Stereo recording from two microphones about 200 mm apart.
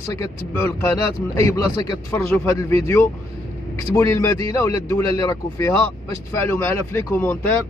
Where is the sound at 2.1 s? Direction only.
10° left (ahead or behind).